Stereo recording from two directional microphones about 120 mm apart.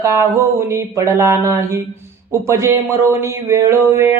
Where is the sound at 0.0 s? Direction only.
25° right (ahead or behind).